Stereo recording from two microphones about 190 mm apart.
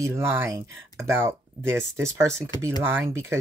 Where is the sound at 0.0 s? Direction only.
15° right (ahead or behind).